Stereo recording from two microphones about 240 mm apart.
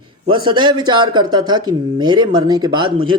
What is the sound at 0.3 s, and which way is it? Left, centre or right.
Speech, centre.